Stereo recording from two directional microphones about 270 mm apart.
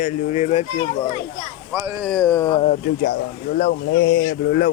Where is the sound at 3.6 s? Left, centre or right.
Left.